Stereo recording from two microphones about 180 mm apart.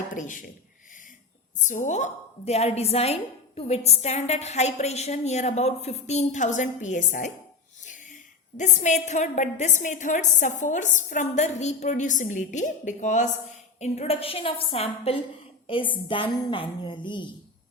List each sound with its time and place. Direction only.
0.1 s a man's voice: 45° left (ahead or behind)
1.5 s a woman's voice: 45° left (ahead or behind)
8.5 s a woman's voice: 40° left (ahead or behind); by 17.2 s 25° left (ahead or behind)